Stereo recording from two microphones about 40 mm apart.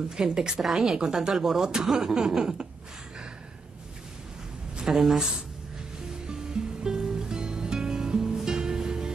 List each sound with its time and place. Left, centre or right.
0.1 s speech: centre
1.3 s speech: centre
4.8 s speech: centre
6.2 s music: centre